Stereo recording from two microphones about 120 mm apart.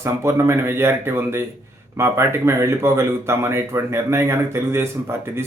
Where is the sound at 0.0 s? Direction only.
25° right (ahead or behind).